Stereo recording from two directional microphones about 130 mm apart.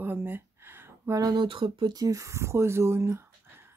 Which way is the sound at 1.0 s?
25° right (ahead or behind).